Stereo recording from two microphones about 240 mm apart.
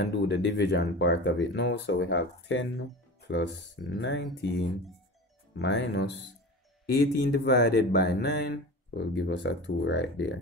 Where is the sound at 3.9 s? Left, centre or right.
Left.